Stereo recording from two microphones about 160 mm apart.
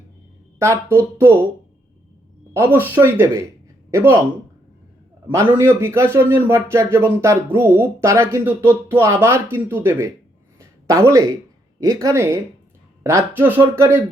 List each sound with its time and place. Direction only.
0.6 s speech: 15° right (ahead or behind)
2.5 s speech: 15° right (ahead or behind)
5.3 s speech: 15° right (ahead or behind)
10.6 s a sound: 15° right (ahead or behind)
11.8 s speech: 25° right (ahead or behind)